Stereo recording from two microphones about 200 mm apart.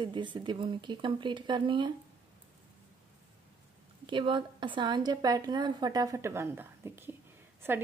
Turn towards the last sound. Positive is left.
turn(degrees=-10)  # may be behind; listen again after turning